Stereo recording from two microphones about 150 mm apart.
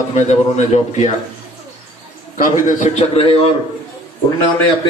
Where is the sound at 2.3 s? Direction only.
65° left (ahead or behind); by 3.4 s 40° left (ahead or behind).